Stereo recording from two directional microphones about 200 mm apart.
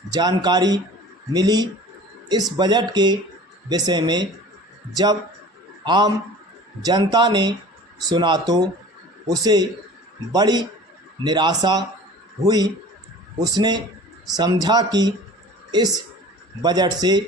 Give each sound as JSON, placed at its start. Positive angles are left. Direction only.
{"t": 0.1, "sound": "speech", "side_deg": -20}
{"t": 5.8, "sound": "speech", "side_deg": -20}
{"t": 16.6, "sound": "speech", "side_deg": -20}